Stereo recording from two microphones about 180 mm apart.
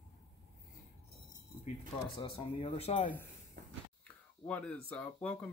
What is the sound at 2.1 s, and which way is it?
Speech, 30° left (ahead or behind).